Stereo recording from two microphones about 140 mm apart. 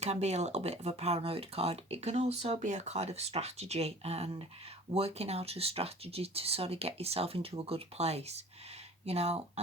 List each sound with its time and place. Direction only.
0.0 s speech: 50° right (ahead or behind)